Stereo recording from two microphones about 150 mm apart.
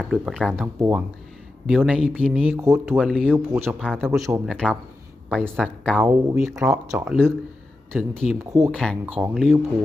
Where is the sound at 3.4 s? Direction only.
15° right (ahead or behind).